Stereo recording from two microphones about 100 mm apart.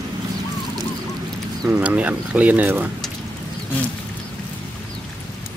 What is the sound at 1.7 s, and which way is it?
Speech, 15° right (ahead or behind).